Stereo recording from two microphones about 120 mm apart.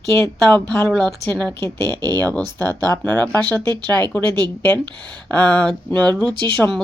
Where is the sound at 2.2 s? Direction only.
15° left (ahead or behind).